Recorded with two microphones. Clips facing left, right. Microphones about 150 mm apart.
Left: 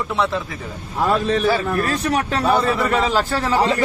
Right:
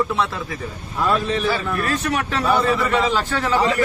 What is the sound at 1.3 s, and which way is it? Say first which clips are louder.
A man's voice: left 3 dB; 40° left (ahead or behind).